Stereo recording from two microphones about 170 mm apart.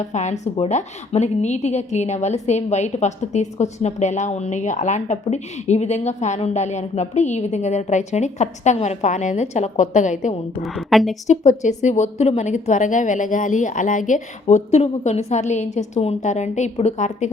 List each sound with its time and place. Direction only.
0.0 s a woman's voice: 45° left (ahead or behind)
10.6 s a woman's voice: centre (ahead or behind)
11.3 s a woman's voice: 45° left (ahead or behind)